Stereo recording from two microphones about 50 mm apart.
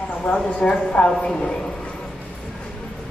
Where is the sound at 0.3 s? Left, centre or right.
Left.